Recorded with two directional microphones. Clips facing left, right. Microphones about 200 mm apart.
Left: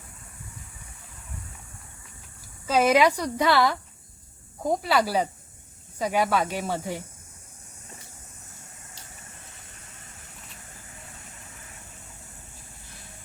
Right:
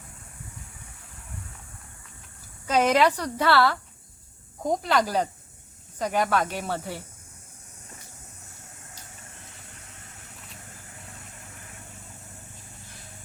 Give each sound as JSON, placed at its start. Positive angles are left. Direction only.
{"t": 2.6, "sound": "a woman's voice", "side_deg": 5}
{"t": 4.6, "sound": "a woman's voice", "side_deg": 5}